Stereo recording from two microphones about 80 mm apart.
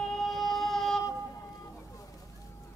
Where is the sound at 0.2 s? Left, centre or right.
Centre.